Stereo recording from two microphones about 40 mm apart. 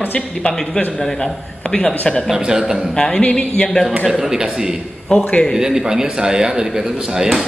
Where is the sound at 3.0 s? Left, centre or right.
Left.